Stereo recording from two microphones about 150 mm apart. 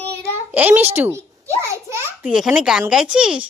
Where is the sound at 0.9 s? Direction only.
15° right (ahead or behind).